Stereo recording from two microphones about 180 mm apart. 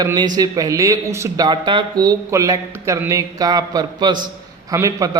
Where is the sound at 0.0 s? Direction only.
20° right (ahead or behind).